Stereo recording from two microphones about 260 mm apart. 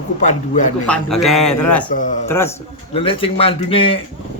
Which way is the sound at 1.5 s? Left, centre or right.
Left.